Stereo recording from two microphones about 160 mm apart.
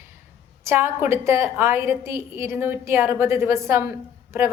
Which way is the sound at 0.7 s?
15° right (ahead or behind).